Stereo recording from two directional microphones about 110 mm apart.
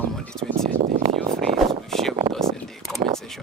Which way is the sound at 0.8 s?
70° right (ahead or behind).